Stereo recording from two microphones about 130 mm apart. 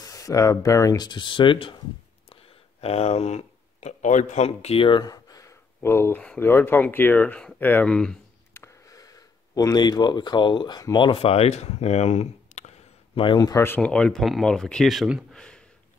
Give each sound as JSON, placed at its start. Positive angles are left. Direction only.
{"t": 0.0, "sound": "speech", "side_deg": 25}
{"t": 2.8, "sound": "speech", "side_deg": 55}
{"t": 8.5, "sound": "a sound", "side_deg": 25}
{"t": 11.1, "sound": "speech", "side_deg": 50}
{"t": 13.4, "sound": "speech", "side_deg": 30}
{"t": 13.7, "sound": "speech", "side_deg": 5}
{"t": 15.3, "sound": "a sound", "side_deg": 5}